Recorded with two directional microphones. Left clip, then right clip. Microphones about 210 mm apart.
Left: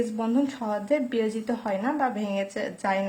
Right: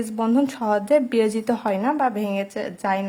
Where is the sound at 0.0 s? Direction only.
35° right (ahead or behind).